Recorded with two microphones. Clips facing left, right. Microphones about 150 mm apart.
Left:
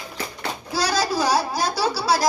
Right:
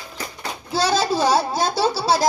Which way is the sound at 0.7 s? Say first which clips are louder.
Right 3 dB; 25° right (ahead or behind).